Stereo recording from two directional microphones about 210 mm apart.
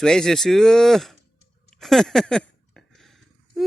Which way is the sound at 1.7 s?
Centre (ahead or behind).